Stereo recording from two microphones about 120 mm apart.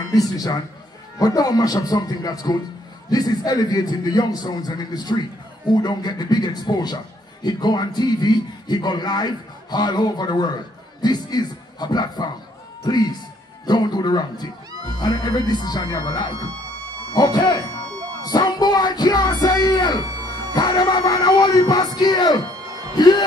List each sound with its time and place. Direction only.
0.1 s a man's voice: 30° left (ahead or behind)